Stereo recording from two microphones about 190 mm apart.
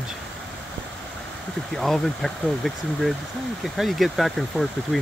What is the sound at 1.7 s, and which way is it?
Speech, centre (ahead or behind).